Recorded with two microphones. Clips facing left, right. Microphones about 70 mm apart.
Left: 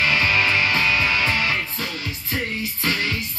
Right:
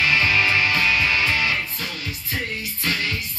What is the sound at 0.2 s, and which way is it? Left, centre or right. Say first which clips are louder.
Music: even; left.